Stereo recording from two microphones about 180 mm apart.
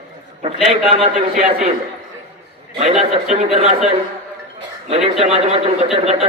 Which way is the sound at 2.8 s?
35° right (ahead or behind).